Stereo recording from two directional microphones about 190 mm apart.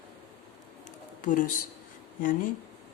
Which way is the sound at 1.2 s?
45° left (ahead or behind).